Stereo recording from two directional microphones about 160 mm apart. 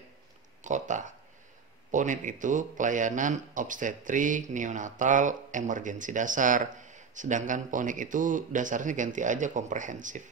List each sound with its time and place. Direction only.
0.7 s a man's voice: 50° right (ahead or behind)